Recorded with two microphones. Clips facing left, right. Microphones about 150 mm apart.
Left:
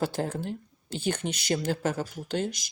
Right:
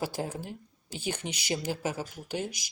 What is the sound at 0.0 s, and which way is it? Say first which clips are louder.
Speech: left 4 dB; 10° right (ahead or behind).